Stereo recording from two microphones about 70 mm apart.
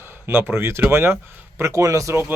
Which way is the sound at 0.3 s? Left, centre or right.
Right.